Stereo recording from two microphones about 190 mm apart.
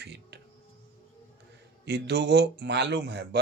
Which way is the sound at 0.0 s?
65° right (ahead or behind).